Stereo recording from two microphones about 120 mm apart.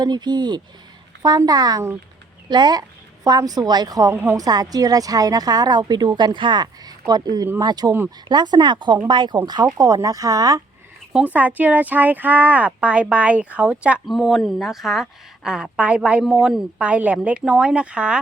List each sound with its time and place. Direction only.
0.0 s a woman's voice: 35° right (ahead or behind)
4.1 s speech: 20° right (ahead or behind)
4.4 s a woman's voice: 30° right (ahead or behind)
9.7 s speech: 30° right (ahead or behind)
11.1 s speech: 10° right (ahead or behind)